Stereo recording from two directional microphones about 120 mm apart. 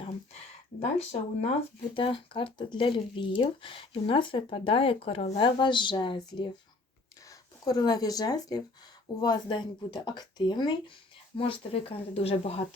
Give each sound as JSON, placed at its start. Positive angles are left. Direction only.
{"t": 0.9, "sound": "speech", "side_deg": 60}
{"t": 2.0, "sound": "speech", "side_deg": 45}
{"t": 11.3, "sound": "speech", "side_deg": 50}